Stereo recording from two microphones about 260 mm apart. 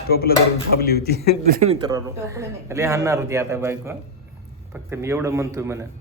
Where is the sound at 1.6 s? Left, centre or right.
Centre.